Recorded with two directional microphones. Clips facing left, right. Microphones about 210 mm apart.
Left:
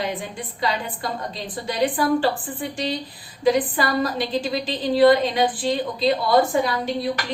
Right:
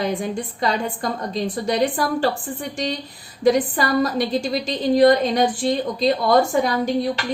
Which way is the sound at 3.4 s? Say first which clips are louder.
Right 2 dB; 45° right (ahead or behind).